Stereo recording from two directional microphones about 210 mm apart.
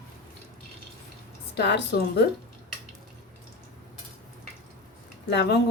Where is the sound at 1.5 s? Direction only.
55° left (ahead or behind).